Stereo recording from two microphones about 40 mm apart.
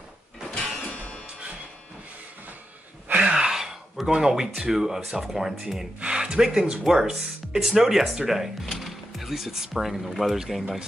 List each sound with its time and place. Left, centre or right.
0.8 s music: left
3.2 s gasp: centre
4.1 s speech: centre
5.9 s speech: right